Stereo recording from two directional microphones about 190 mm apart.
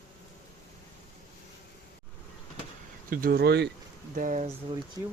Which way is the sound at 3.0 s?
45° right (ahead or behind).